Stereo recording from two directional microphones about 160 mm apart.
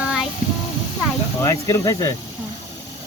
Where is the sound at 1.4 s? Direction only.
20° left (ahead or behind).